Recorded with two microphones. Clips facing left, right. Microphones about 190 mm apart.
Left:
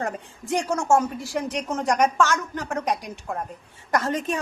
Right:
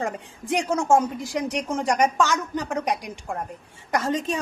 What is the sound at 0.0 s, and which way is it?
Speech, 10° right (ahead or behind).